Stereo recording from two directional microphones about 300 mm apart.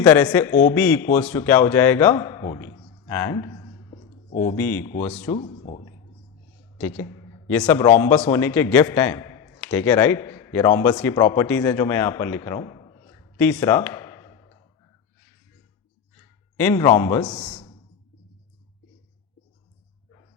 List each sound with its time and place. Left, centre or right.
0.0 s a man's voice: centre
3.1 s a sound: centre
4.5 s a man's voice: centre
5.3 s speech: centre
6.7 s a man's voice: centre
13.3 s a sound: centre
16.6 s a man's voice: centre